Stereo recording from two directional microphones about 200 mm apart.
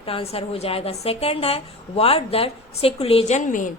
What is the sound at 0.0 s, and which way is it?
A woman's voice, 30° left (ahead or behind).